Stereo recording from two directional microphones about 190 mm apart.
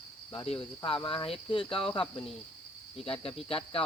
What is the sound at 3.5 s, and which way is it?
Cricket, 30° left (ahead or behind).